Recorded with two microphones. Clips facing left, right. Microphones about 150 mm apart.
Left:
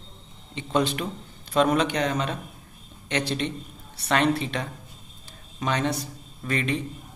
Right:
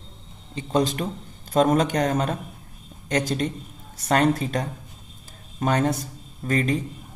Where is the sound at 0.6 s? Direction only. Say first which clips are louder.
Right 2 dB; 40° right (ahead or behind).